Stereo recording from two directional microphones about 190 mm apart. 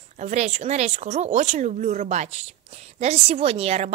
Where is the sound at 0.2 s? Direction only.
35° right (ahead or behind).